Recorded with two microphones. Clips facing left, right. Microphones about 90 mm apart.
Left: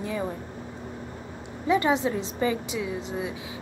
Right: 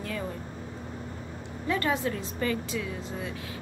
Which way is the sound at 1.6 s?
15° left (ahead or behind).